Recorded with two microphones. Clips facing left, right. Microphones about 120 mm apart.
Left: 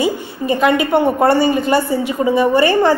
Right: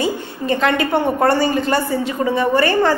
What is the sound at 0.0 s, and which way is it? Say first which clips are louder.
A woman's voice: left 3 dB; 10° left (ahead or behind).